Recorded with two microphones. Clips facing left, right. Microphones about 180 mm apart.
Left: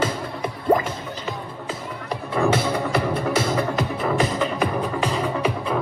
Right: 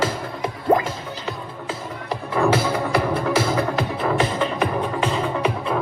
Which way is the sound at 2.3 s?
55° right (ahead or behind).